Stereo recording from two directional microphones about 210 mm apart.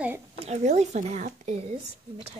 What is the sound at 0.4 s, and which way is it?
Speech, 30° right (ahead or behind).